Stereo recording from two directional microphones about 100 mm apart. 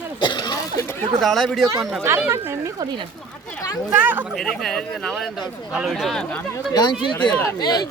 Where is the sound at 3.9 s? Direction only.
20° right (ahead or behind).